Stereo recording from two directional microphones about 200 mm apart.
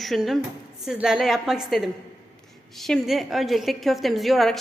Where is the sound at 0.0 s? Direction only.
Centre (ahead or behind).